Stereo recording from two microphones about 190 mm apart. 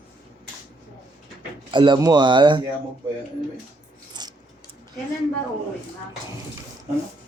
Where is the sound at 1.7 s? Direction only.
25° right (ahead or behind).